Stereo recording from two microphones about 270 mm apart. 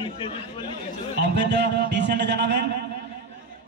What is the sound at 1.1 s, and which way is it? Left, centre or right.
A man's voice, right.